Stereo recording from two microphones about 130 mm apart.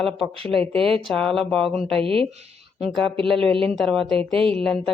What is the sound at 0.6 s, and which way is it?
Speech, 5° left (ahead or behind).